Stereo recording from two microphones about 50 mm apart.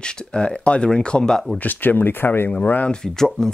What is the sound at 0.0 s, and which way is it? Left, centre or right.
Speech, centre.